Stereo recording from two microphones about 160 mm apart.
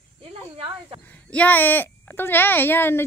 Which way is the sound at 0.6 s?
30° right (ahead or behind).